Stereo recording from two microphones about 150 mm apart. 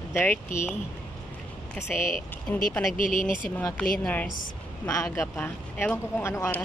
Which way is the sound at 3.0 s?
60° left (ahead or behind).